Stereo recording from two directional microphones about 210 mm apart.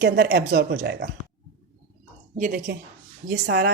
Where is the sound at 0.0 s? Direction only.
50° right (ahead or behind).